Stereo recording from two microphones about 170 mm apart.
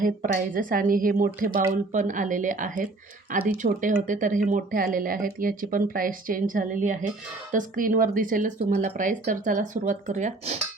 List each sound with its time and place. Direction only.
0.0 s speech: 55° right (ahead or behind)